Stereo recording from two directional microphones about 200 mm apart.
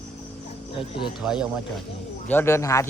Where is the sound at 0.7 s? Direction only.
25° left (ahead or behind).